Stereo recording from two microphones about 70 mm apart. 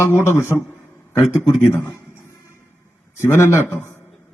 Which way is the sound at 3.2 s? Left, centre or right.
Left.